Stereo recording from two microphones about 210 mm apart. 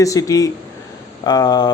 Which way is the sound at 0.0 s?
15° left (ahead or behind).